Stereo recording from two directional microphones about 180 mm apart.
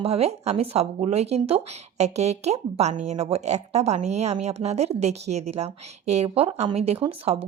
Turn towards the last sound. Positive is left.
turn(degrees=-30)  # may be behind; listen again after turning